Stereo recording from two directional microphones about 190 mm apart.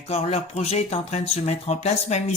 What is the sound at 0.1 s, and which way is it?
Speech, 35° left (ahead or behind).